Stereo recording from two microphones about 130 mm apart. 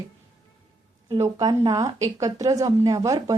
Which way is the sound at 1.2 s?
25° right (ahead or behind).